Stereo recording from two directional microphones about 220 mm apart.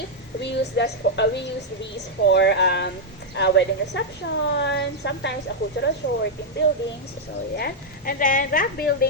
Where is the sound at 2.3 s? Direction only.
50° left (ahead or behind).